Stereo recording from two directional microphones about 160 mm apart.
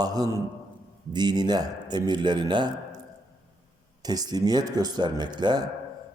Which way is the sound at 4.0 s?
25° right (ahead or behind).